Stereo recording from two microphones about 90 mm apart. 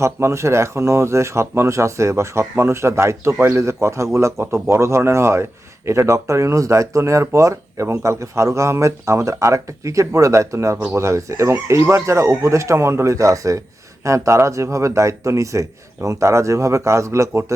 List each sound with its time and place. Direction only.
0.0 s speech: 30° right (ahead or behind)